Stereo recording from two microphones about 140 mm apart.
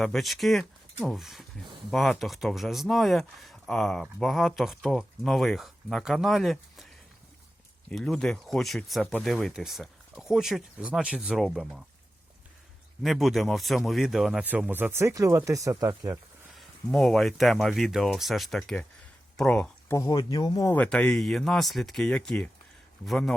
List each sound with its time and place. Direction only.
0.0 s speech: centre (ahead or behind)
7.9 s speech: 5° left (ahead or behind)
13.0 s speech: centre (ahead or behind); by 16.1 s 25° right (ahead or behind)
16.6 s speech: centre (ahead or behind)
19.9 s speech: 25° left (ahead or behind)
20.7 s speech: 10° left (ahead or behind)